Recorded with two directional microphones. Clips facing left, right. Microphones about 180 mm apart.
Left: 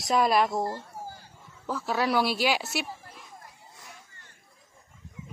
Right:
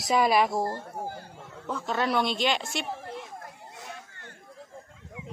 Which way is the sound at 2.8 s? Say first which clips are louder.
Right 6 dB; 70° right (ahead or behind).